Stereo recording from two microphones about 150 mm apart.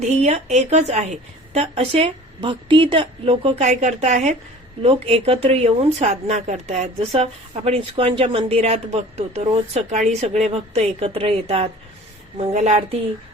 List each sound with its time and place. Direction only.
0.2 s a woman's voice: 45° right (ahead or behind)
4.8 s a woman's voice: 40° right (ahead or behind)